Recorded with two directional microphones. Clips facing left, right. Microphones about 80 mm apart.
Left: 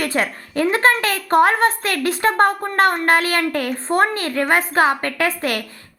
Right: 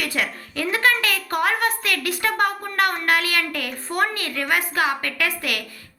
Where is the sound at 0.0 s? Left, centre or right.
Left.